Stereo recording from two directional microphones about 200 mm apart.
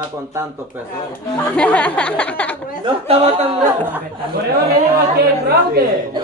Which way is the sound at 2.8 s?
30° right (ahead or behind).